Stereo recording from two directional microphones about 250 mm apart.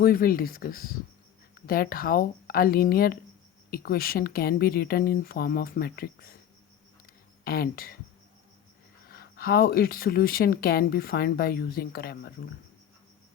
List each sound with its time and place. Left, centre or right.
0.0 s speech: left
7.4 s speech: left
9.0 s speech: left